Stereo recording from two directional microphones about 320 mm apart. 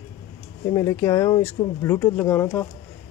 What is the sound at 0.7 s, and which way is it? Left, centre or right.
Speech, centre.